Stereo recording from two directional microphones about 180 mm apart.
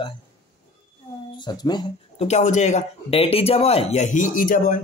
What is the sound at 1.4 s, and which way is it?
Speech, 25° left (ahead or behind).